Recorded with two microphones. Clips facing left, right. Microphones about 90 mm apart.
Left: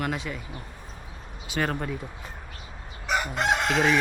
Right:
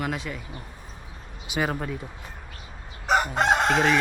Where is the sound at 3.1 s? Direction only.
40° right (ahead or behind).